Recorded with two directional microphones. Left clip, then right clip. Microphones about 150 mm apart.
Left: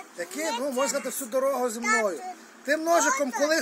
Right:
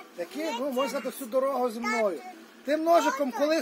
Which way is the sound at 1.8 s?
40° left (ahead or behind).